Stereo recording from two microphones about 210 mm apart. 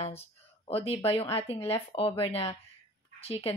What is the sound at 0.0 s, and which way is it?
A woman's voice, 30° left (ahead or behind).